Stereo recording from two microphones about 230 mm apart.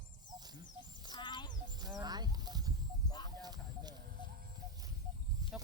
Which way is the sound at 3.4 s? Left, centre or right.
Centre.